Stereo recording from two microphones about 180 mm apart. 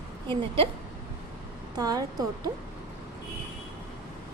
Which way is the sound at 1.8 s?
20° right (ahead or behind).